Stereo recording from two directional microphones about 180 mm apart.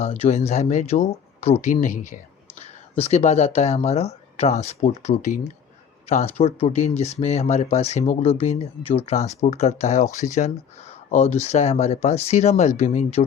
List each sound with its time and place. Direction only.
0.2 s speech: 40° left (ahead or behind)